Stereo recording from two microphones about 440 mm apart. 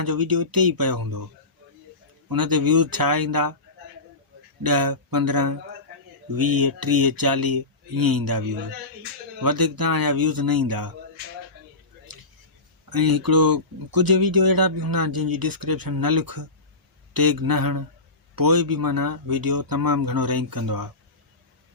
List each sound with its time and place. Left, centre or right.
0.0 s speech: right
2.3 s speech: right
4.6 s speech: right
12.9 s speech: right